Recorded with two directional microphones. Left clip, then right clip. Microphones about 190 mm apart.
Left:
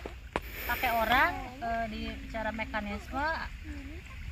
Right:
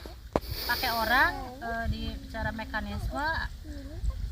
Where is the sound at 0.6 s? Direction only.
5° right (ahead or behind).